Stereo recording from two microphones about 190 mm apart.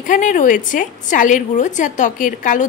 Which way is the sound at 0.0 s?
45° left (ahead or behind).